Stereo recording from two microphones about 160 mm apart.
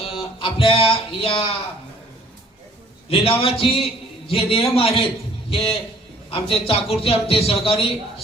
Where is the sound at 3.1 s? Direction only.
35° left (ahead or behind).